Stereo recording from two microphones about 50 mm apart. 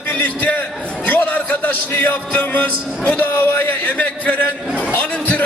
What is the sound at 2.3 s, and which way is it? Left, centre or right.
A man's voice, left.